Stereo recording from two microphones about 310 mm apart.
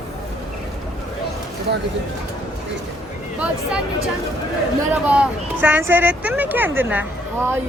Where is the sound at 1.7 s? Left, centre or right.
Right.